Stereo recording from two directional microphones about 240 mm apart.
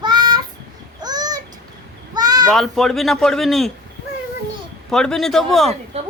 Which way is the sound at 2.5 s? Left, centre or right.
Centre.